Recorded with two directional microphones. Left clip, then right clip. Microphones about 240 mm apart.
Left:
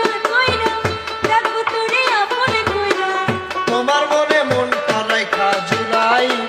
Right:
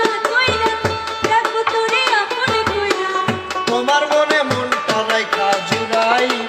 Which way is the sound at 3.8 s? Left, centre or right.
Centre.